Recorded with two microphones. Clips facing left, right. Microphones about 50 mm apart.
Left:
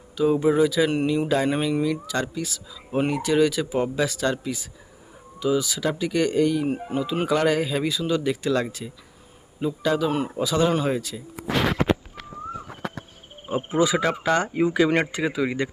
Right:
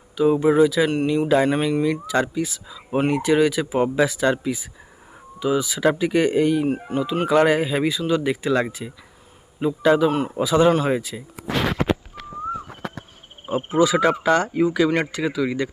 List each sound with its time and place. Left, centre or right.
0.4 s speech: centre; by 3.0 s right
3.0 s speech: centre
6.7 s speech: centre
7.3 s speech: centre
10.1 s speech: centre
10.3 s speech: centre
13.7 s speech: centre
14.0 s speech: centre
14.3 s speech: centre